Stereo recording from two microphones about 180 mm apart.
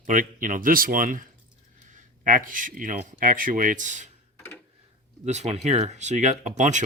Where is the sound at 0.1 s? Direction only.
45° right (ahead or behind).